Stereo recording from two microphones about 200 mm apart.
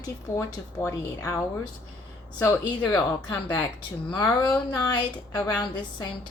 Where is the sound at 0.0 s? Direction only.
15° left (ahead or behind).